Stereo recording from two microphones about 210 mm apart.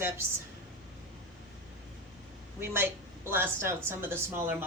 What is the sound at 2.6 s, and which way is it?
A woman's voice, 10° right (ahead or behind).